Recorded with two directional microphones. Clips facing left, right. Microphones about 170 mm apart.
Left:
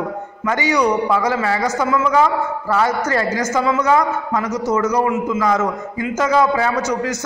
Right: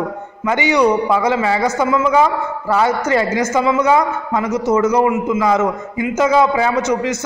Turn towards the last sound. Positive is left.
turn(degrees=-25)  # may be behind; listen again after turning